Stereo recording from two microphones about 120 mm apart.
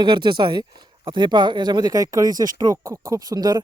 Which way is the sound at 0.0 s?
40° right (ahead or behind).